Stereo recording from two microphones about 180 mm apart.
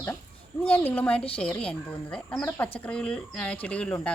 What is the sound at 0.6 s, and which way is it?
A woman's voice, 10° left (ahead or behind).